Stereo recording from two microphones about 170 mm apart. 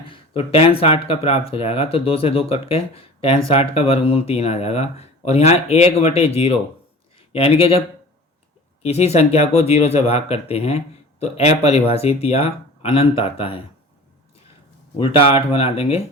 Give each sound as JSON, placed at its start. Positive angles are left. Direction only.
{"t": 0.0, "sound": "speech", "side_deg": 35}
{"t": 8.8, "sound": "speech", "side_deg": 40}
{"t": 14.9, "sound": "speech", "side_deg": 30}